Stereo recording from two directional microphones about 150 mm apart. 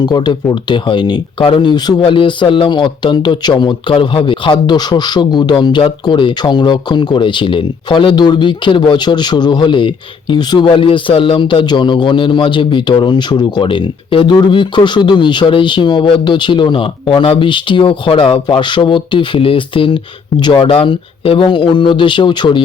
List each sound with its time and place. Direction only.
0.0 s speech: 30° left (ahead or behind)